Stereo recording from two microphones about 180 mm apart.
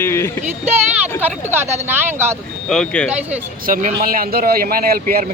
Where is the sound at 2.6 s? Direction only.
5° left (ahead or behind).